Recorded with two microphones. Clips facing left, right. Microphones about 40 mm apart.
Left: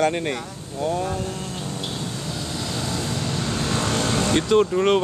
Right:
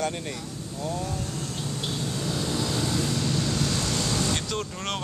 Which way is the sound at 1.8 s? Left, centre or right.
Centre.